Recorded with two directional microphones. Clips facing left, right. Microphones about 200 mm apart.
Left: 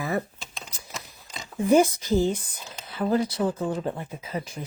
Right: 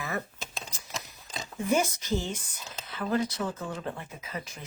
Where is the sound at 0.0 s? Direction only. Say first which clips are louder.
Left 6 dB; 35° left (ahead or behind).